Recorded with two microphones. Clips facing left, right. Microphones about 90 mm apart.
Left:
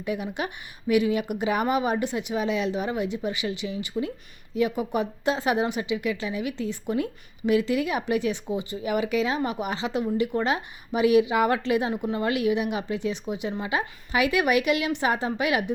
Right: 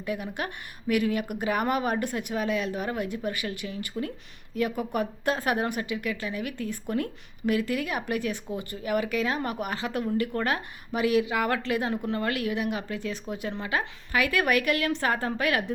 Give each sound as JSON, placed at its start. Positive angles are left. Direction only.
{"t": 0.0, "sound": "speech", "side_deg": 15}
{"t": 4.7, "sound": "speech", "side_deg": 5}